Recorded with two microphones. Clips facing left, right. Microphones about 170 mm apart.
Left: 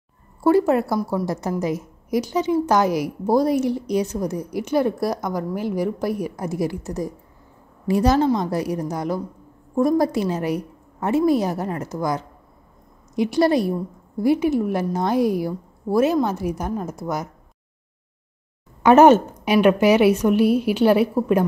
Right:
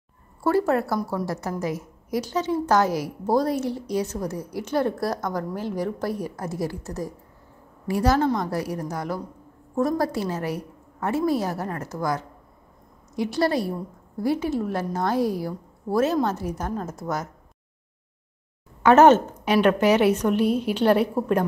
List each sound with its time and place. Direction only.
0.4 s a woman's voice: 15° left (ahead or behind)
18.8 s a woman's voice: 15° left (ahead or behind)